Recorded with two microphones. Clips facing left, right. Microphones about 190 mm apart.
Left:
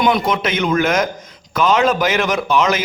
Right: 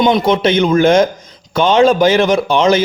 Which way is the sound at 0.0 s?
25° right (ahead or behind).